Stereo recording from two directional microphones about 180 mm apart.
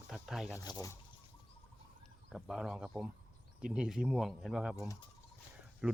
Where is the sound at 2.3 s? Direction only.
Centre (ahead or behind).